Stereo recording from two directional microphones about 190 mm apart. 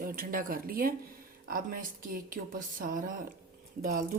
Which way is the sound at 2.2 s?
45° right (ahead or behind).